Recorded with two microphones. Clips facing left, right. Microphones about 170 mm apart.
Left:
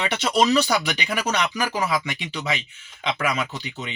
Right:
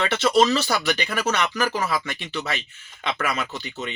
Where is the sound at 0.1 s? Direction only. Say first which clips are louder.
Even; 15° left (ahead or behind).